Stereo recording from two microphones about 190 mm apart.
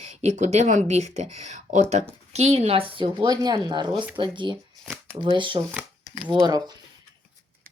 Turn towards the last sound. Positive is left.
turn(degrees=-20)  # may be behind; listen again after turning